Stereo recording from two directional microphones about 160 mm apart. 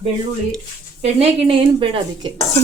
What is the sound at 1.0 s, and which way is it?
A woman's voice, 35° right (ahead or behind).